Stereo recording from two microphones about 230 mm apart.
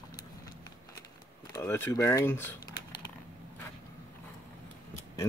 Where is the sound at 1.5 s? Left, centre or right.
Centre.